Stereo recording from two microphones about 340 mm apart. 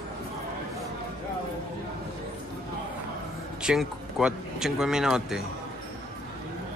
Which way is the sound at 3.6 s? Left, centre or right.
Centre.